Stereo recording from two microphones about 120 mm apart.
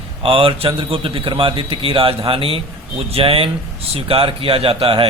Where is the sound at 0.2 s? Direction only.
50° right (ahead or behind).